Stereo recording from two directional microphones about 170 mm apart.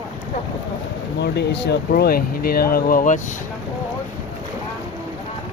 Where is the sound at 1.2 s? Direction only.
90° left; by 3.2 s 55° left (ahead or behind).